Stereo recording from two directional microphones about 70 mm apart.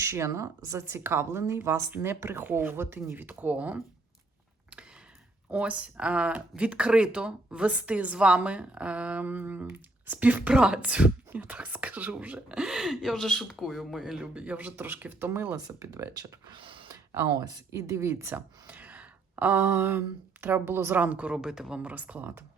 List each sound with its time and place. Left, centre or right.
0.0 s speech: right
5.5 s speech: right
10.5 s speech: centre
12.5 s speech: centre; by 15.4 s right
15.5 s speech: right
17.3 s speech: right
17.7 s speech: right
18.7 s speech: right